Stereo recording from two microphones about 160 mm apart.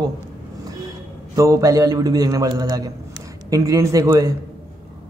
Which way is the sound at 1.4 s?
20° right (ahead or behind).